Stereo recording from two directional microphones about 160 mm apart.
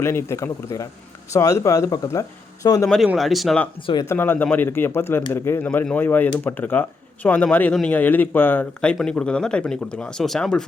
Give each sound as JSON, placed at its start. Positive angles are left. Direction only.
{"t": 0.0, "sound": "speech", "side_deg": 15}
{"t": 3.2, "sound": "speech", "side_deg": 0}
{"t": 4.1, "sound": "speech", "side_deg": 15}